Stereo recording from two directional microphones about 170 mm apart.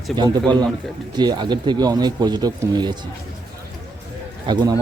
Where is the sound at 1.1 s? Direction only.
25° right (ahead or behind).